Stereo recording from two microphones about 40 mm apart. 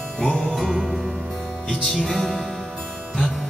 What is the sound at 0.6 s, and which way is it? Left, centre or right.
Music, centre.